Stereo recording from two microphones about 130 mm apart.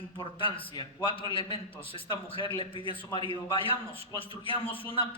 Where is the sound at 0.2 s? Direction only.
40° left (ahead or behind).